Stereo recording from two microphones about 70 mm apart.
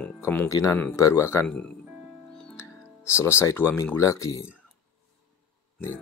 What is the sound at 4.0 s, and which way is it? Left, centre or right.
Speech, left.